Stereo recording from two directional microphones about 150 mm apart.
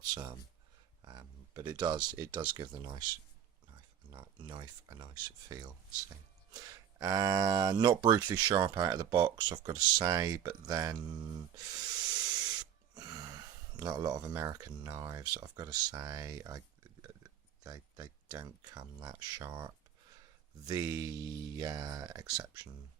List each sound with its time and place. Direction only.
0.1 s speech: 25° right (ahead or behind)
4.1 s speech: 30° right (ahead or behind)